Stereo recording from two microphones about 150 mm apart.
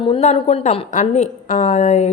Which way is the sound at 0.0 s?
40° left (ahead or behind).